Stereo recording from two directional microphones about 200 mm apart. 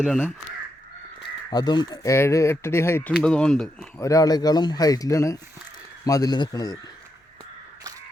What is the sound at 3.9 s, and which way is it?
Speech, 15° left (ahead or behind).